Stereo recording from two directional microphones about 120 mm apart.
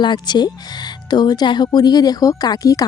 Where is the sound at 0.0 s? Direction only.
40° left (ahead or behind).